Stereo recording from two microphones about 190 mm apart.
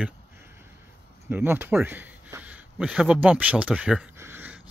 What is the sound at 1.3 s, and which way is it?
Speech, 10° right (ahead or behind).